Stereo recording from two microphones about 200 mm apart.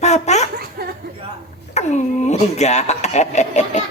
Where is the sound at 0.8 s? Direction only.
50° right (ahead or behind).